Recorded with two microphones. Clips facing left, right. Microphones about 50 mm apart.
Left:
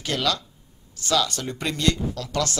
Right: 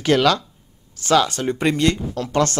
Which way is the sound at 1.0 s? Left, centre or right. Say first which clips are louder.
Right 7 dB; right.